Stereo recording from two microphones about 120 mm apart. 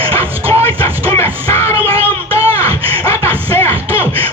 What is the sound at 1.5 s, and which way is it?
Music, 20° left (ahead or behind).